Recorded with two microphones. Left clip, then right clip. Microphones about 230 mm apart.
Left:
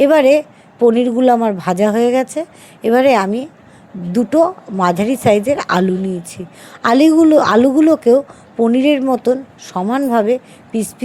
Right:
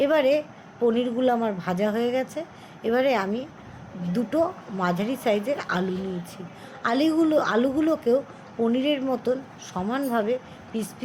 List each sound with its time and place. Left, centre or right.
0.0 s a woman's voice: left
6.8 s a woman's voice: left